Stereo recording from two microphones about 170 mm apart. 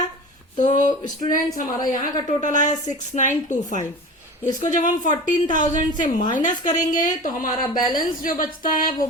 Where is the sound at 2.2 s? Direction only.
45° left (ahead or behind).